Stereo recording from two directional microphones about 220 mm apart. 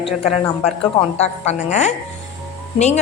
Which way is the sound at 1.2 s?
30° left (ahead or behind).